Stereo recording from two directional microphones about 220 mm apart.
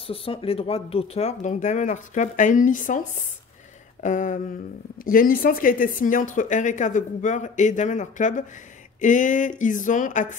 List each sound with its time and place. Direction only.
0.0 s speech: 25° left (ahead or behind)